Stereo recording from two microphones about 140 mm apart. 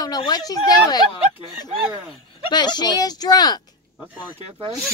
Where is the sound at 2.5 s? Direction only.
30° left (ahead or behind).